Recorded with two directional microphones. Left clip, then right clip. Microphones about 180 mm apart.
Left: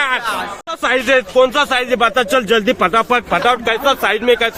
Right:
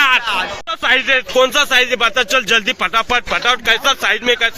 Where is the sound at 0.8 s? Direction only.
Centre (ahead or behind).